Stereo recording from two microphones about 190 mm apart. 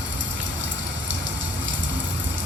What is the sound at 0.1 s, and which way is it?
Rain, 75° right (ahead or behind).